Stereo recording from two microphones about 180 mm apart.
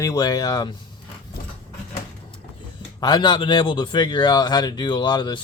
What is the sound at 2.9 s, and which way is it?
Speech, 25° left (ahead or behind).